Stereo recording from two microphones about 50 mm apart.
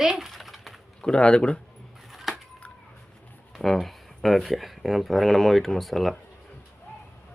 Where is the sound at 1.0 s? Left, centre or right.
Centre.